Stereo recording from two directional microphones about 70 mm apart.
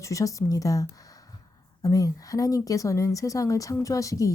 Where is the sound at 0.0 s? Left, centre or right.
Left.